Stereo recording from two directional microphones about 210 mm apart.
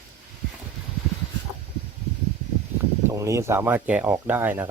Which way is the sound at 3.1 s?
15° right (ahead or behind).